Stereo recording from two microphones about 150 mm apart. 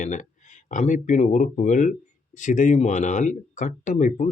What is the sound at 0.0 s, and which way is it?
Speech, 55° left (ahead or behind).